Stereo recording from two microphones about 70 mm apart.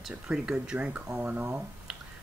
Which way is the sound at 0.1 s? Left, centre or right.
Centre.